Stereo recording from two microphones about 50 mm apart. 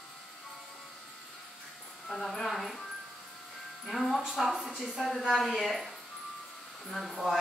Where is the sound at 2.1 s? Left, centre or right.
Centre.